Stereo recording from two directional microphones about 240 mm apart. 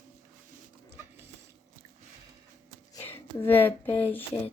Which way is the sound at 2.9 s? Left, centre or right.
Centre.